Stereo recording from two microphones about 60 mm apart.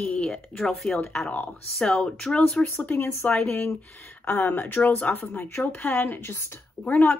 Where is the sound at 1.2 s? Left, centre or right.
Left.